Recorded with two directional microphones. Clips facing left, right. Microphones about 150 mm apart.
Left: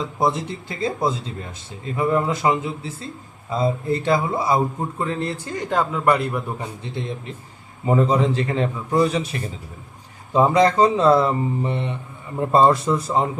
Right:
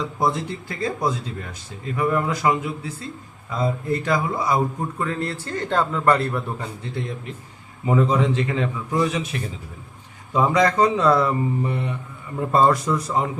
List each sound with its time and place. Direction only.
0.0 s a man's voice: 20° left (ahead or behind)
7.9 s a man's voice: 35° left (ahead or behind)
10.3 s a man's voice: 30° left (ahead or behind)